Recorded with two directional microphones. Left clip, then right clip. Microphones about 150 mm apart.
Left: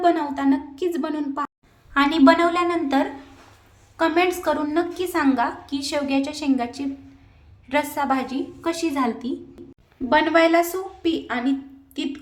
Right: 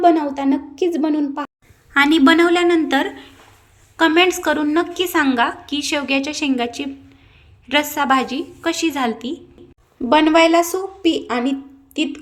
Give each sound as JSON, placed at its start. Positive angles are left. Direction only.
{"t": 0.0, "sound": "a woman's voice", "side_deg": -10}
{"t": 1.9, "sound": "a woman's voice", "side_deg": -25}
{"t": 10.1, "sound": "a woman's voice", "side_deg": -15}